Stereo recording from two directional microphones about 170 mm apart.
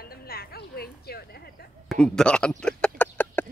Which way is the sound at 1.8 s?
5° left (ahead or behind).